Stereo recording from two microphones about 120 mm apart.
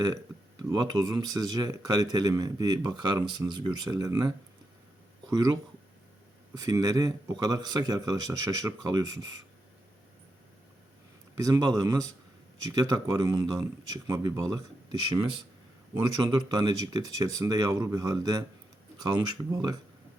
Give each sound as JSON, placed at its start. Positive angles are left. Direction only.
{"t": 0.6, "sound": "speech", "side_deg": -30}
{"t": 5.3, "sound": "a man's voice", "side_deg": -30}
{"t": 11.3, "sound": "a man's voice", "side_deg": -25}